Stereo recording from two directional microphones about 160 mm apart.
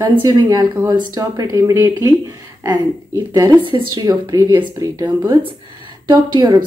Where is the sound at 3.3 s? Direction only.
25° right (ahead or behind).